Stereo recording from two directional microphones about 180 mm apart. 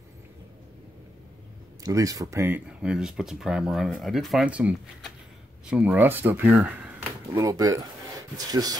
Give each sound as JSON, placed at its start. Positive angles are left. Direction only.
{"t": 1.8, "sound": "speech", "side_deg": -20}